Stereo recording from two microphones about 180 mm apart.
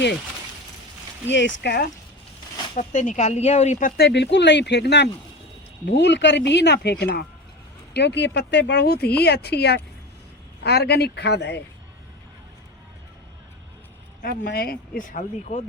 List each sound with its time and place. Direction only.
1.3 s speech: 85° left; by 1.9 s 65° left (ahead or behind)
2.7 s speech: 40° left (ahead or behind); by 7.3 s 60° left (ahead or behind)
7.9 s speech: 70° left (ahead or behind)
14.2 s speech: 55° left (ahead or behind)